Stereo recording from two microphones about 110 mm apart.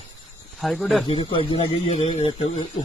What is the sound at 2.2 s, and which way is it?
Speech, 55° left (ahead or behind).